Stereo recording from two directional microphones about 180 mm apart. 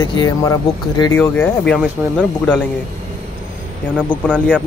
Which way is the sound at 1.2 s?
10° left (ahead or behind).